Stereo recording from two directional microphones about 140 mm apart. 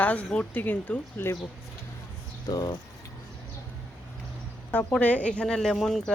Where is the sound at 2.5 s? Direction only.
30° left (ahead or behind).